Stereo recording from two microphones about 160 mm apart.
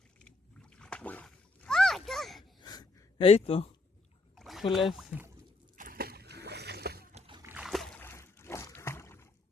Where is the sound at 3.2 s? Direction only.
35° left (ahead or behind).